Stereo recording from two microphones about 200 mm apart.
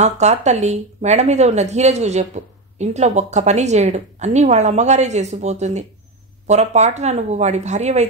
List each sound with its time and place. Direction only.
0.0 s speech: 35° right (ahead or behind)